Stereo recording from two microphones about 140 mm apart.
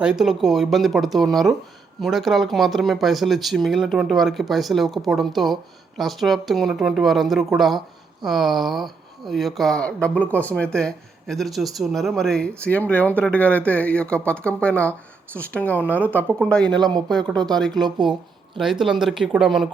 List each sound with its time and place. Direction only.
0.0 s speech: 5° right (ahead or behind)
16.6 s speech: 30° right (ahead or behind)
17.1 s speech: centre (ahead or behind)